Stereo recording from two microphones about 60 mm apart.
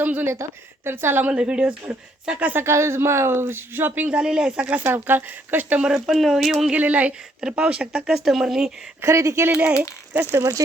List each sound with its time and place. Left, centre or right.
0.0 s speech: right
0.9 s speech: right
1.2 s speech: centre
2.6 s speech: right
4.1 s speech: centre
4.8 s speech: right
5.8 s speech: centre
6.7 s speech: right
8.0 s speech: centre
9.0 s speech: right
9.6 s speech: centre